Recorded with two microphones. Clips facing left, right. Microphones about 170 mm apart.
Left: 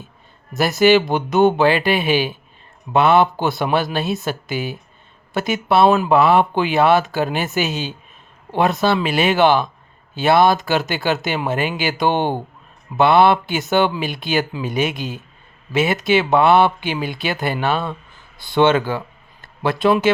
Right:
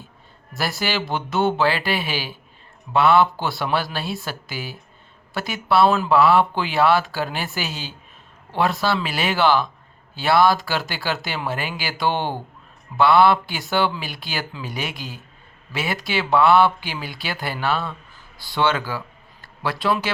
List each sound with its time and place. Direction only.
0.5 s speech: 20° left (ahead or behind)